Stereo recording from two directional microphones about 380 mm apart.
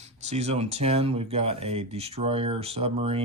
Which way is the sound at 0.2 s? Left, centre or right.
Centre.